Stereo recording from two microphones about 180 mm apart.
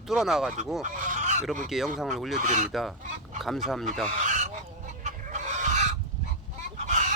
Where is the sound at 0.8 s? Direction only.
45° right (ahead or behind).